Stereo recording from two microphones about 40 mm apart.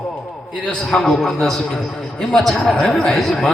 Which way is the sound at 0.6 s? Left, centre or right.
Left.